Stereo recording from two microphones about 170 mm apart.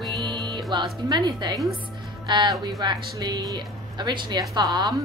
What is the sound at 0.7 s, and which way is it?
Speech, 25° right (ahead or behind).